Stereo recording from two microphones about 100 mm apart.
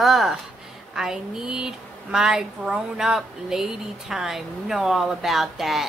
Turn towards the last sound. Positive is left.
turn(degrees=0)  # may be behind; listen again after turning